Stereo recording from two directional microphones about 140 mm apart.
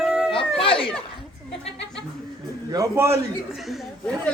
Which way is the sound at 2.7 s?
20° right (ahead or behind).